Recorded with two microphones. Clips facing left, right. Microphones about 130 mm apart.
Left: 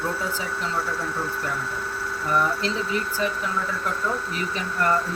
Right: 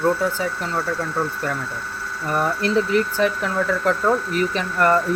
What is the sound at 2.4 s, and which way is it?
Speech, 60° right (ahead or behind).